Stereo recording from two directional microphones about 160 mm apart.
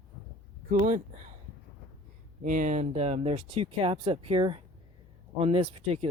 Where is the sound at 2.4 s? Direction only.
55° right (ahead or behind); by 6.0 s 40° right (ahead or behind).